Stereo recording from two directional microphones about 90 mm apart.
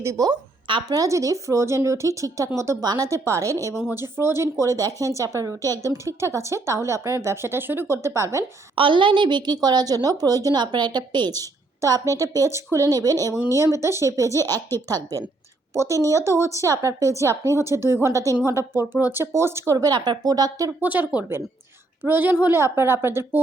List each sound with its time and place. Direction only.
0.0 s speech: 35° right (ahead or behind)
0.3 s speech: 50° right (ahead or behind); by 2.5 s 35° right (ahead or behind)
2.8 s a woman's voice: 50° right (ahead or behind)
3.1 s speech: 35° right (ahead or behind)
8.7 s a woman's voice: 70° right (ahead or behind); by 10.6 s 40° right (ahead or behind)
10.6 s a woman's voice: 55° right (ahead or behind)
13.6 s a woman's voice: 30° right (ahead or behind)
19.9 s a woman's voice: 50° right (ahead or behind)
20.8 s a woman's voice: 20° right (ahead or behind)